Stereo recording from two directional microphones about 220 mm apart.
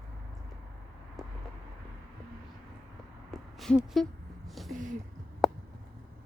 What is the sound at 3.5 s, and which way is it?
Speech, centre (ahead or behind).